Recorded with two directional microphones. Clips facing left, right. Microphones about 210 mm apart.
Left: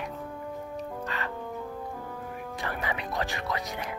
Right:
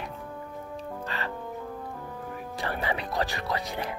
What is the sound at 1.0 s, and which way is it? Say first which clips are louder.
Music: right 2 dB; 30° right (ahead or behind).